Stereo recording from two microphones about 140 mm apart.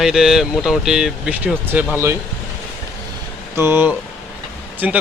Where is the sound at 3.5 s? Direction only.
15° right (ahead or behind).